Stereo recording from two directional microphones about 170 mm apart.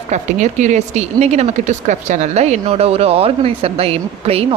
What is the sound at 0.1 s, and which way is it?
Speech, 45° right (ahead or behind).